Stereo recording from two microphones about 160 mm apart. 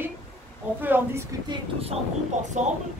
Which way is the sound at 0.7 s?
10° right (ahead or behind).